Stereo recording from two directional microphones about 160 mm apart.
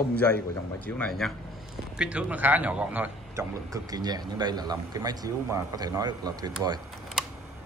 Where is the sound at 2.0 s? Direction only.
5° right (ahead or behind); by 6.5 s 25° right (ahead or behind).